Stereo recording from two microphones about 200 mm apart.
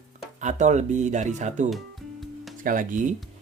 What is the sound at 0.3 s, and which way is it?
Speech, 35° right (ahead or behind).